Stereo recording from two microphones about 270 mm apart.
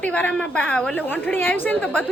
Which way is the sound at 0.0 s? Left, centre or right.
Centre.